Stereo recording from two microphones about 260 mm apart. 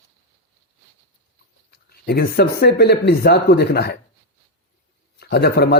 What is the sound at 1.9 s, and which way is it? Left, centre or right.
Speech, left.